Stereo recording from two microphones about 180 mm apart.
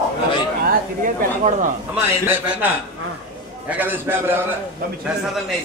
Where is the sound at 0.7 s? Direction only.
45° right (ahead or behind).